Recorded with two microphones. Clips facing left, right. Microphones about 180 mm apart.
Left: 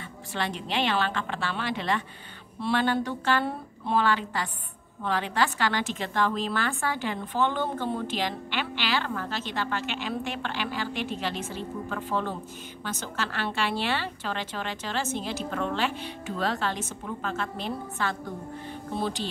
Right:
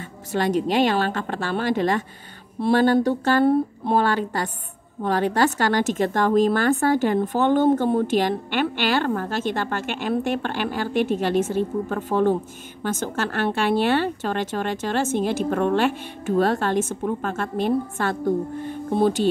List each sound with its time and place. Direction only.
0.3 s a woman's voice: 45° right (ahead or behind)